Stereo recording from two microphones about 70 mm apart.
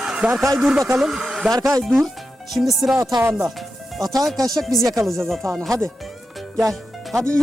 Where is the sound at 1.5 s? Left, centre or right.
Right.